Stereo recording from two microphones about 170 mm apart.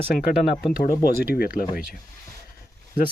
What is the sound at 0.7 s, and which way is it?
Speech, 60° left (ahead or behind).